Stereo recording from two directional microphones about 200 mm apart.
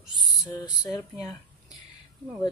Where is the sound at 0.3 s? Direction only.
20° left (ahead or behind).